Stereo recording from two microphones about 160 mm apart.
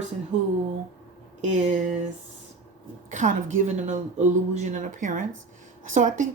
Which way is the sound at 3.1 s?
50° right (ahead or behind).